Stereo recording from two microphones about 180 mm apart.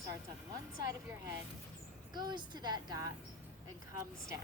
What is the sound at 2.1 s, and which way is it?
Speech, 25° right (ahead or behind).